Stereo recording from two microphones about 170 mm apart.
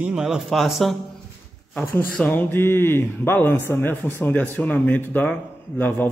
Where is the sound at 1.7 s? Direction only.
15° left (ahead or behind).